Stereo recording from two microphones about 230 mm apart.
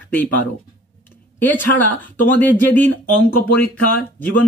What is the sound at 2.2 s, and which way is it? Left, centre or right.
Speech, centre.